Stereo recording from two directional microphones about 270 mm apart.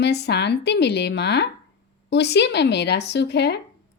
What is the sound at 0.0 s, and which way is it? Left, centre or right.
Speech, left.